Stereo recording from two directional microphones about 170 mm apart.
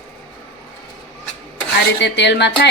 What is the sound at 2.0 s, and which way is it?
Speech, 90° left.